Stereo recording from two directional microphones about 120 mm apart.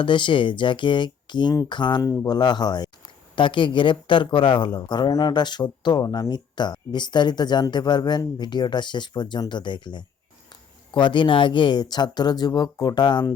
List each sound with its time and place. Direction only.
0.0 s a man's voice: 40° left (ahead or behind)
2.0 s a man's voice: 25° left (ahead or behind)